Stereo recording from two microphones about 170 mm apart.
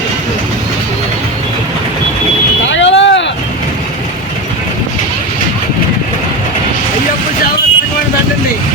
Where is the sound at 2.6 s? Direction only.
90° left.